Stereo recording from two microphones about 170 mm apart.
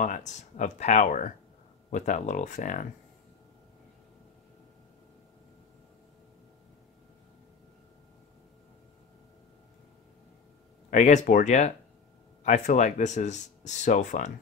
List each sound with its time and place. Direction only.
0.0 s speech: 45° left (ahead or behind)
10.9 s speech: 45° left (ahead or behind)